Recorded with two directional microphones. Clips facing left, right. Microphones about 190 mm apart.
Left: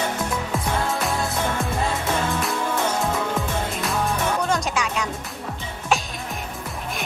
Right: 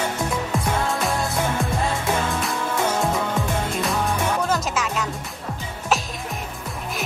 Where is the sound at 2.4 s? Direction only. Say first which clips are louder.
Even; centre (ahead or behind).